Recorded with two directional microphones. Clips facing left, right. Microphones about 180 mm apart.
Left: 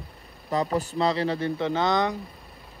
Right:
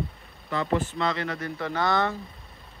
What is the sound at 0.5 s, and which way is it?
A man's voice, 40° left (ahead or behind).